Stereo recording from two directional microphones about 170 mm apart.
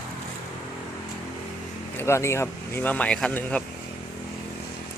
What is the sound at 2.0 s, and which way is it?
Speech, 15° left (ahead or behind).